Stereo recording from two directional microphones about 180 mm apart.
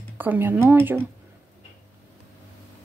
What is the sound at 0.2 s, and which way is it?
Speech, 10° right (ahead or behind).